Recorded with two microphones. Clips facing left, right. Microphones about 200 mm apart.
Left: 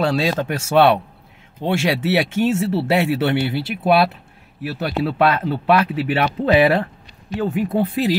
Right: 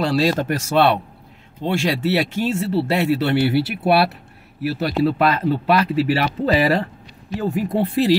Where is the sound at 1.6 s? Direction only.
Centre (ahead or behind).